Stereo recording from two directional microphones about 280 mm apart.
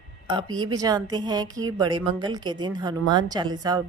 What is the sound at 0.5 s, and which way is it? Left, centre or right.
A woman's voice, centre.